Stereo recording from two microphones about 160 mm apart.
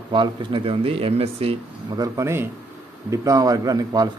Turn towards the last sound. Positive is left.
turn(degrees=-25)  # may be behind; listen again after turning